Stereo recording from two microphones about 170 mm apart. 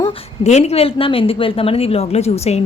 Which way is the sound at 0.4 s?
40° left (ahead or behind).